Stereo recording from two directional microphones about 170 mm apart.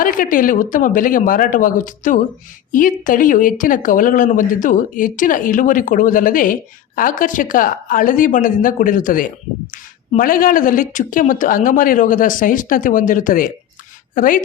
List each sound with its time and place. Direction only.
0.0 s speech: 55° left (ahead or behind)